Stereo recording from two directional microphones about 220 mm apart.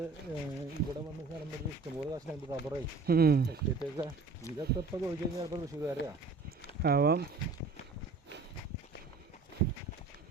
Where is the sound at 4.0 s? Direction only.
15° right (ahead or behind).